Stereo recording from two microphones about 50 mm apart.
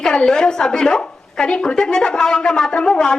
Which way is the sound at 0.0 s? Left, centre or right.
Centre.